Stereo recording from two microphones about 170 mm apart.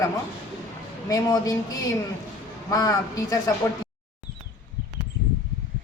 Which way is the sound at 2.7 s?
20° left (ahead or behind).